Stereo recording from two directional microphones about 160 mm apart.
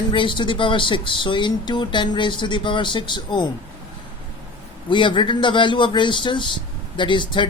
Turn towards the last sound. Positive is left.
turn(degrees=30)  # may be behind; listen again after turning